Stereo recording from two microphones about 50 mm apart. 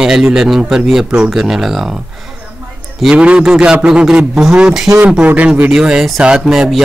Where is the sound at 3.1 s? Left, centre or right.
Right.